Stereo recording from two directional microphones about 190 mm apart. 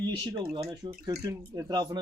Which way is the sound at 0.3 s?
20° right (ahead or behind).